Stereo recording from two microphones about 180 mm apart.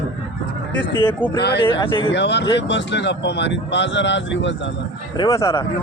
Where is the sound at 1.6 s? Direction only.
25° left (ahead or behind).